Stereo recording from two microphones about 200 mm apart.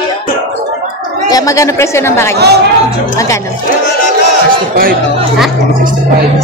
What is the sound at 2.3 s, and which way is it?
Speech, 55° right (ahead or behind).